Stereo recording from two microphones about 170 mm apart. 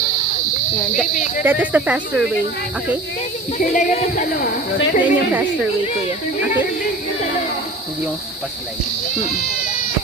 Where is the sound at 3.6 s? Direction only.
50° left (ahead or behind).